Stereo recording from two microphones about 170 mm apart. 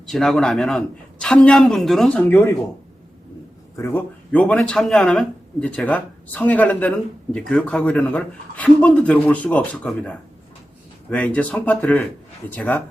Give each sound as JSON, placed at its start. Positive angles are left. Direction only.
{"t": 0.0, "sound": "a man's voice", "side_deg": 0}
{"t": 3.8, "sound": "speech", "side_deg": 10}